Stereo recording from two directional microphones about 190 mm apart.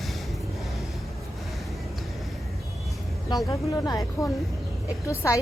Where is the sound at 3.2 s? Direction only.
20° left (ahead or behind).